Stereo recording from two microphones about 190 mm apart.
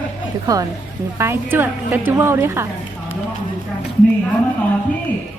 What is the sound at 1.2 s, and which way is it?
A woman's voice, 10° right (ahead or behind).